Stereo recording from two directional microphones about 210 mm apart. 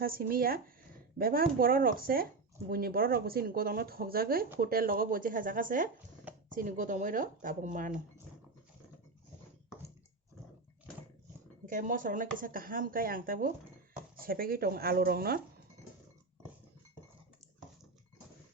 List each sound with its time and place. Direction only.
0.0 s speech: 45° right (ahead or behind)
11.6 s speech: 40° right (ahead or behind)